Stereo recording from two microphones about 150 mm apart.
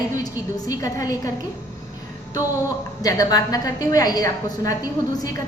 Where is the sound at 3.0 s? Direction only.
25° left (ahead or behind).